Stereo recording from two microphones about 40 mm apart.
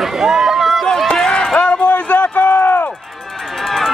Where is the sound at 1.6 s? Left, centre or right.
Left.